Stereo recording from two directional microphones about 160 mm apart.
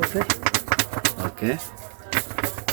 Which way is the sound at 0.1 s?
25° right (ahead or behind).